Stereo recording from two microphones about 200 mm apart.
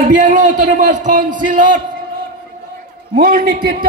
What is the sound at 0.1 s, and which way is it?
A man's voice, 40° right (ahead or behind).